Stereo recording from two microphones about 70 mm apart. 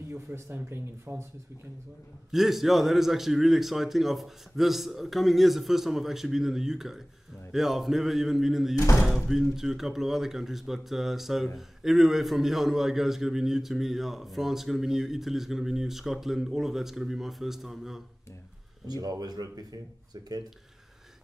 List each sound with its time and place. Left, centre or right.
0.1 s speech: right
2.3 s a man's voice: centre
18.9 s speech: right